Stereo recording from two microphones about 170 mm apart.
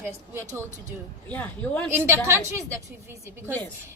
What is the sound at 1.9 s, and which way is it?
Speech, 15° right (ahead or behind).